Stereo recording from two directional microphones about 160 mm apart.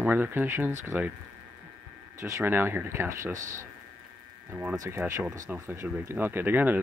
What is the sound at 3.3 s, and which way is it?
Speech, 55° right (ahead or behind).